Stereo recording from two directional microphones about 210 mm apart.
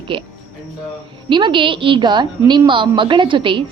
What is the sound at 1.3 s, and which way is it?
Speech, 25° right (ahead or behind).